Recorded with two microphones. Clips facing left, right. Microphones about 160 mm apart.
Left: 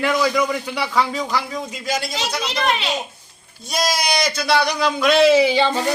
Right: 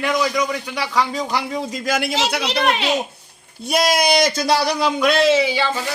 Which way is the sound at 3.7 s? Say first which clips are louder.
Right 4 dB; 60° right (ahead or behind).